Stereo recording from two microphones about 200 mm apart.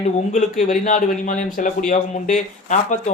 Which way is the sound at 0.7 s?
40° left (ahead or behind).